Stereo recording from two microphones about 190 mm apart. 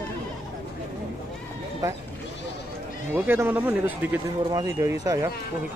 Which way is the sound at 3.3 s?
10° right (ahead or behind).